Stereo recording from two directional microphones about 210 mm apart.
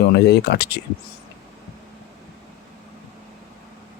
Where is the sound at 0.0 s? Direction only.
50° left (ahead or behind).